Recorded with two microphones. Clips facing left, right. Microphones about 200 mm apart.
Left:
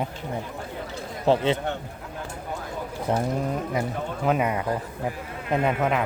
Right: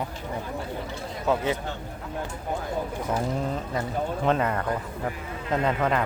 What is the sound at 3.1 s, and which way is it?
Speech, 30° left (ahead or behind).